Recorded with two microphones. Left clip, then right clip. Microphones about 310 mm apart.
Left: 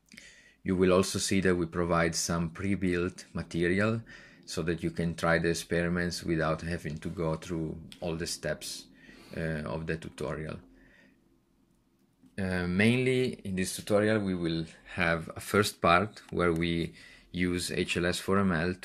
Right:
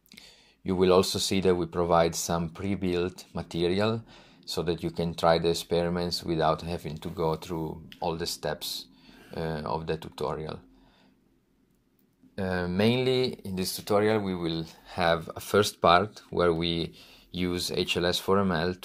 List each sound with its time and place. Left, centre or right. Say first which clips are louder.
0.1 s speech: even; centre
12.4 s speech: right 2 dB; centre